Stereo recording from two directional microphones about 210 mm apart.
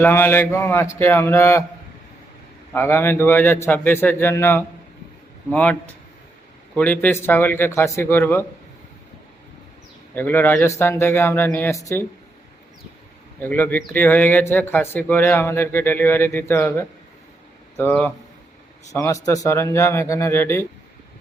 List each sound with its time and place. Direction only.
0.0 s speech: 10° left (ahead or behind)
2.7 s speech: 10° left (ahead or behind)
10.2 s speech: 10° left (ahead or behind)
13.4 s speech: 10° left (ahead or behind)